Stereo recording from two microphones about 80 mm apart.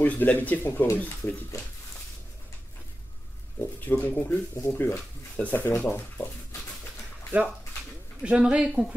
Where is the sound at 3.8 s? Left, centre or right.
Left.